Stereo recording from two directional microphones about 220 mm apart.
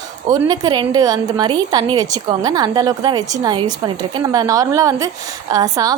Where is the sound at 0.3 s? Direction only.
15° right (ahead or behind).